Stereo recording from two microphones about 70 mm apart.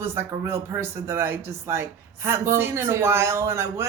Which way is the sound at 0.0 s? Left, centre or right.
Right.